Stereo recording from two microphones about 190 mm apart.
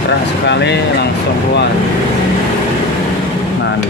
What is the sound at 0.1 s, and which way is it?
Speech, 65° left (ahead or behind).